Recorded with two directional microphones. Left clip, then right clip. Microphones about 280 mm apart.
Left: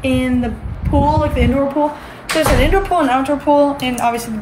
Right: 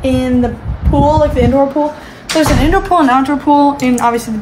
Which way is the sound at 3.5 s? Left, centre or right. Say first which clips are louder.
Right 2 dB; centre.